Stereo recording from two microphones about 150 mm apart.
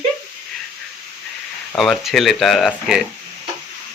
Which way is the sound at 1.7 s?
5° left (ahead or behind).